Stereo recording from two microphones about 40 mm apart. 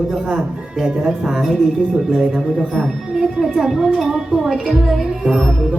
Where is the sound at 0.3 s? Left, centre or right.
Centre.